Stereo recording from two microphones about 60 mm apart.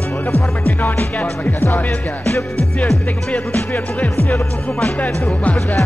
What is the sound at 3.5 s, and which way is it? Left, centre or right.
Music, left.